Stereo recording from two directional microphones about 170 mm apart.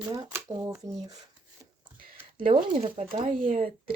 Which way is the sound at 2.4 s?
30° right (ahead or behind).